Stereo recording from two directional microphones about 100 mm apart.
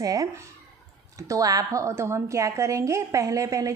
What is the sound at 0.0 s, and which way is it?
A woman's voice, 35° right (ahead or behind).